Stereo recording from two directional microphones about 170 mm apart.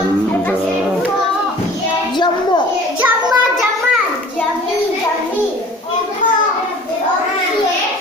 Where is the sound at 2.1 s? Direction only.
25° left (ahead or behind).